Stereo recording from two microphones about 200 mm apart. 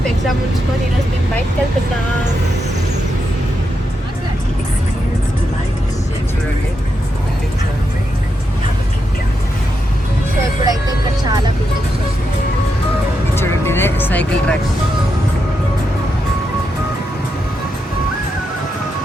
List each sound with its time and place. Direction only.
10.6 s music: 20° right (ahead or behind)
13.3 s vehicle: 10° left (ahead or behind)